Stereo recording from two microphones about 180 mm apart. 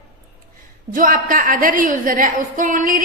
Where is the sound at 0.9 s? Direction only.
50° right (ahead or behind).